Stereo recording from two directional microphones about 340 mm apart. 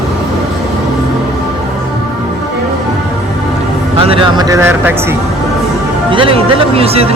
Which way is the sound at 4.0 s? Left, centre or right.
Centre.